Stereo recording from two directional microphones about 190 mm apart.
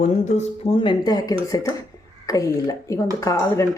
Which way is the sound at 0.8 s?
25° left (ahead or behind).